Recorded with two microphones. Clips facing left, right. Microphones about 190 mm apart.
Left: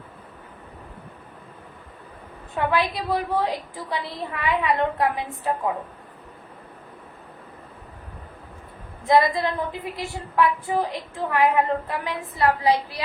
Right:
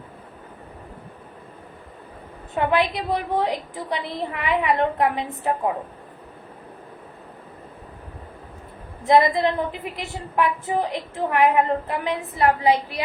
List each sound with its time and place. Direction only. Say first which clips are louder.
2.6 s a woman's voice: right 2 dB; 20° right (ahead or behind)
9.0 s a woman's voice: right 2 dB; 20° right (ahead or behind)